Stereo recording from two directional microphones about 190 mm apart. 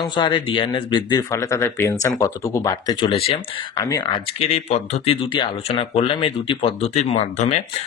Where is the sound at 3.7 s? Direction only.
15° left (ahead or behind).